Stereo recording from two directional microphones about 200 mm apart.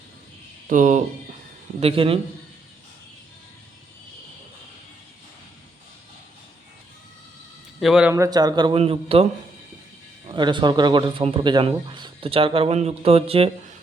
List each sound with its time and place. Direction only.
0.7 s speech: 40° right (ahead or behind)
1.8 s speech: 30° right (ahead or behind)
7.8 s a man's voice: 5° right (ahead or behind)
8.1 s speech: 20° right (ahead or behind)
10.2 s speech: 25° right (ahead or behind)